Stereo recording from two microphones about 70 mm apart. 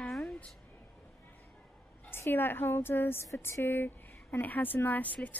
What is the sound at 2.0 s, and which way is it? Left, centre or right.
A woman's voice, left.